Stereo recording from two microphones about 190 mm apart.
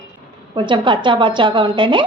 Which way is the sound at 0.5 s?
25° right (ahead or behind).